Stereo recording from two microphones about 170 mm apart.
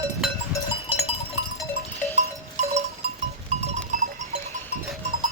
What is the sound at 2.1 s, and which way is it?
Livestock, 40° right (ahead or behind).